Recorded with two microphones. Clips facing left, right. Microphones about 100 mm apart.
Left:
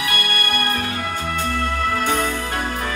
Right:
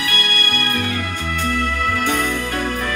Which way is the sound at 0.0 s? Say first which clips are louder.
Even; 35° left (ahead or behind).